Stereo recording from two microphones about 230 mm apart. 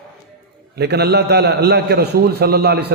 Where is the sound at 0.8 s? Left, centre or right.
Right.